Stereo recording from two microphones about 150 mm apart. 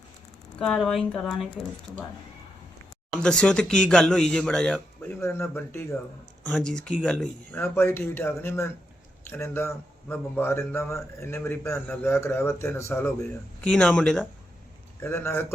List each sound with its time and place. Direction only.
0.6 s a man's voice: 5° left (ahead or behind)
3.2 s a man's voice: 5° left (ahead or behind)